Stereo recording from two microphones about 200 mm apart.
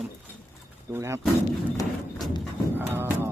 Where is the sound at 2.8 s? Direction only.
10° right (ahead or behind).